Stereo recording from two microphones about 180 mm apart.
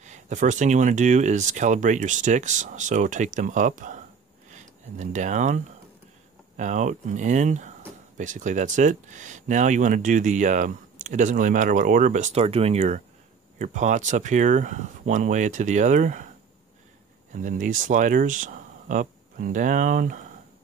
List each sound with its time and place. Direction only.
0.0 s speech: 40° right (ahead or behind)
17.3 s speech: 45° right (ahead or behind)